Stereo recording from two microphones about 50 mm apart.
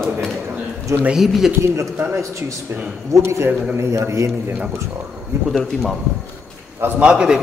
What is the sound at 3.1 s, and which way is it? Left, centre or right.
Speech, right.